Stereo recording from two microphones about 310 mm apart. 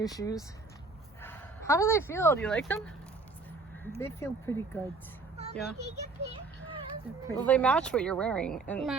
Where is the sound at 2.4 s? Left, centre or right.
Centre.